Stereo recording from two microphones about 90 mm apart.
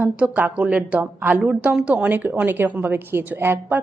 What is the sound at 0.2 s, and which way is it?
A woman's voice, 15° right (ahead or behind).